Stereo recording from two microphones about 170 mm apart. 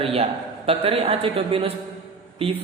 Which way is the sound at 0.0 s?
35° right (ahead or behind).